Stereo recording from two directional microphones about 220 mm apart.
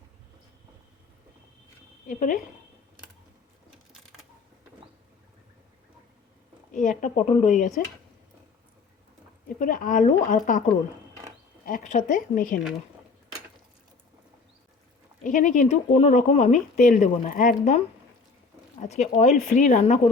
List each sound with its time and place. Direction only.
2.0 s speech: 35° left (ahead or behind)
6.7 s speech: 35° left (ahead or behind)
9.6 s speech: 40° left (ahead or behind)
11.6 s speech: 35° left (ahead or behind)
15.2 s speech: 35° left (ahead or behind)